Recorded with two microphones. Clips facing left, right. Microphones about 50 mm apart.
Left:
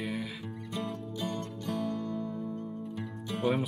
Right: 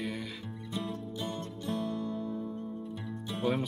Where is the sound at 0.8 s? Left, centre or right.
Left.